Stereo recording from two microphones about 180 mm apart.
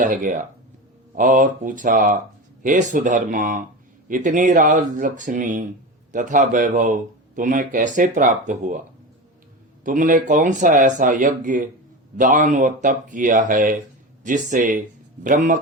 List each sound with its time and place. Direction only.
0.0 s speech: 50° right (ahead or behind)
9.8 s speech: 45° right (ahead or behind)